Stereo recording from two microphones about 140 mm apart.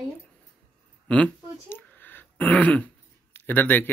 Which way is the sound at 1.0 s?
10° left (ahead or behind).